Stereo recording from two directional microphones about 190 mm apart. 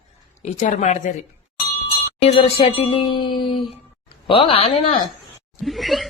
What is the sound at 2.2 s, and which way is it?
A woman's voice, 30° left (ahead or behind).